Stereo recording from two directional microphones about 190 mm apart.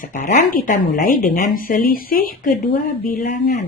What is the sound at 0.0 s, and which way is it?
Speech, 40° left (ahead or behind).